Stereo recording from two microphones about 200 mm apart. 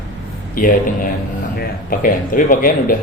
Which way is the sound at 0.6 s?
45° left (ahead or behind).